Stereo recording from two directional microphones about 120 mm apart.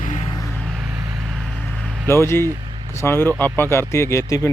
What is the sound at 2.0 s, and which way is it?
Speech, 20° left (ahead or behind).